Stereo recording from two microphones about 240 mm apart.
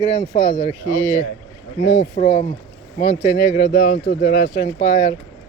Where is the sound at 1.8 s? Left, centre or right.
Left.